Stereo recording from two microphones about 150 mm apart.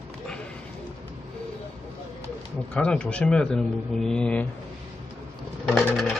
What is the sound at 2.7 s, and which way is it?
Speech, 5° left (ahead or behind).